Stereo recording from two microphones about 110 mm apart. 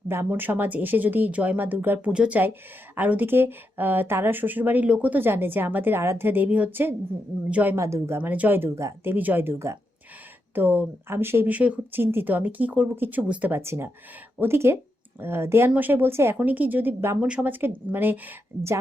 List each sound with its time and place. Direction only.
0.1 s speech: 20° right (ahead or behind)
7.8 s speech: 25° right (ahead or behind)
17.2 s speech: 10° right (ahead or behind)